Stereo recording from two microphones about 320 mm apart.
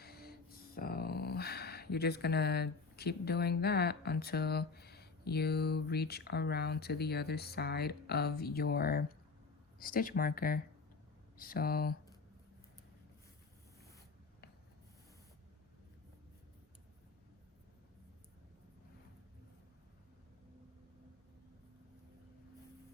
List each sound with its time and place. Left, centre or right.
0.0 s music: left
0.8 s speech: left